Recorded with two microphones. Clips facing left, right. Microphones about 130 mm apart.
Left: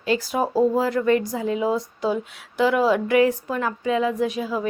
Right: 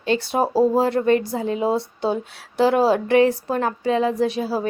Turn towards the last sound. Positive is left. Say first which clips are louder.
# right 2 dB
turn(degrees=-35)  # may be behind; listen again after turning